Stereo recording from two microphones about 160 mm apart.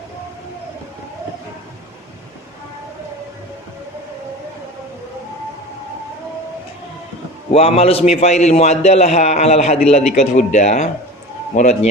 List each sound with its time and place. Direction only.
7.5 s a man's voice: 40° left (ahead or behind)